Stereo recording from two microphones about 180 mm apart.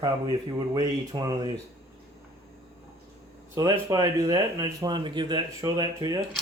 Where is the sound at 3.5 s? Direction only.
20° right (ahead or behind).